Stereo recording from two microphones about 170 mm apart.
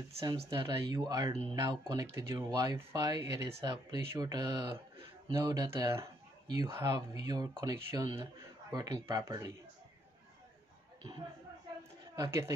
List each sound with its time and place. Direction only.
0.5 s speech: 25° right (ahead or behind)
12.2 s speech: 20° right (ahead or behind)